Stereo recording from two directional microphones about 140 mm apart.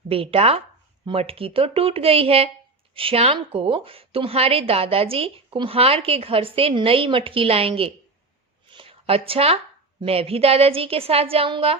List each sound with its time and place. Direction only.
0.1 s a woman's voice: 45° right (ahead or behind)
8.7 s a sound: 40° right (ahead or behind)
10.0 s a woman's voice: 45° right (ahead or behind)